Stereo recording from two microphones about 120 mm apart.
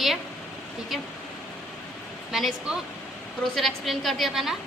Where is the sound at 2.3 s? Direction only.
Centre (ahead or behind).